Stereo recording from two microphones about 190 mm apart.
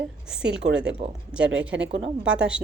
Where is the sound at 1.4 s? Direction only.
75° right (ahead or behind).